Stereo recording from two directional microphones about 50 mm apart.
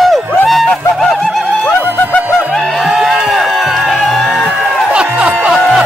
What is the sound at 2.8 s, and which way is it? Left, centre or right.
Music, centre.